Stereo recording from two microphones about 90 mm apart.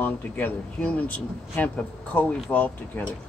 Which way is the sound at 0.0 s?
20° left (ahead or behind).